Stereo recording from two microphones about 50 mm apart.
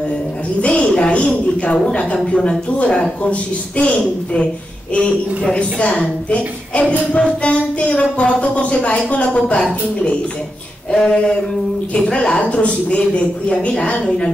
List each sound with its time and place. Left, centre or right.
0.6 s a woman's voice: left
1.2 s a woman's voice: left
1.9 s a woman's voice: centre